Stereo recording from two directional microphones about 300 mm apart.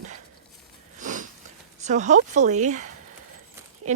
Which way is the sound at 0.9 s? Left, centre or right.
Right.